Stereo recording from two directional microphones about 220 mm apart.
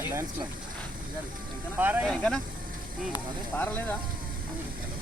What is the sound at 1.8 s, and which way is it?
Speech, 10° right (ahead or behind).